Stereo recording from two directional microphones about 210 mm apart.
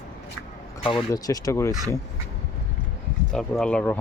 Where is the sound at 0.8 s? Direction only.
20° left (ahead or behind).